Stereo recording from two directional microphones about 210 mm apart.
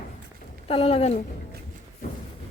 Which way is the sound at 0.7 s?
30° left (ahead or behind).